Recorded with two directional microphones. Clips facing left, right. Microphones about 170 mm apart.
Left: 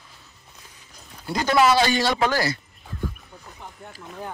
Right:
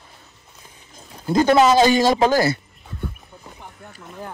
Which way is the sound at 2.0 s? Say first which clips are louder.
Right 6 dB; 40° right (ahead or behind).